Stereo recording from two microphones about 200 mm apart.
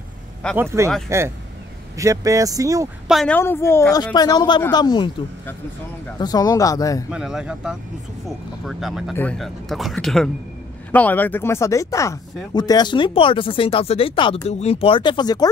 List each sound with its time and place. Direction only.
0.6 s speech: 10° right (ahead or behind)
3.1 s speech: centre (ahead or behind)
3.3 s speech: 10° left (ahead or behind)
6.1 s speech: 20° left (ahead or behind)
7.1 s speech: 5° right (ahead or behind); by 15.4 s 20° left (ahead or behind)